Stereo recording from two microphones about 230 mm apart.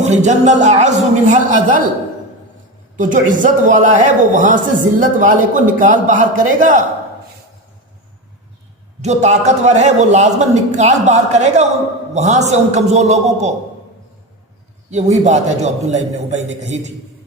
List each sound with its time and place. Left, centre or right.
0.0 s a man's voice: right
3.0 s a man's voice: right
9.0 s a man's voice: right
14.8 s a man's voice: right